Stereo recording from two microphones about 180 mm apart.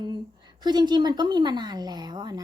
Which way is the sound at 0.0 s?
25° right (ahead or behind).